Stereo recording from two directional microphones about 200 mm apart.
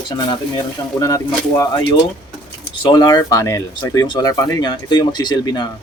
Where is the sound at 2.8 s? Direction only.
25° left (ahead or behind).